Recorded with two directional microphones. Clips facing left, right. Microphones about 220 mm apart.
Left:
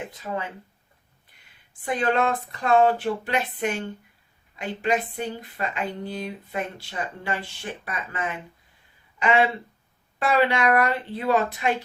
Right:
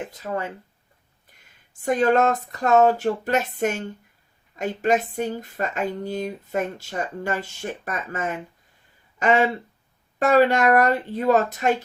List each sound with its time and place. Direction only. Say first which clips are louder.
0.2 s speech: right 3 dB; 45° right (ahead or behind)
1.8 s speech: right 5 dB; 45° right (ahead or behind)